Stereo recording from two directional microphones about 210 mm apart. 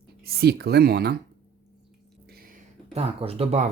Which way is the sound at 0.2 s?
45° right (ahead or behind).